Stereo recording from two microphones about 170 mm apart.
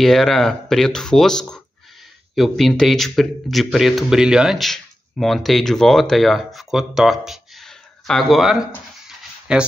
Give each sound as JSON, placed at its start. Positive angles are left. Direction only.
{"t": 0.0, "sound": "speech", "side_deg": 0}